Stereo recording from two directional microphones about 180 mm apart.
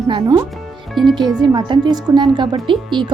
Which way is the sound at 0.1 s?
20° right (ahead or behind).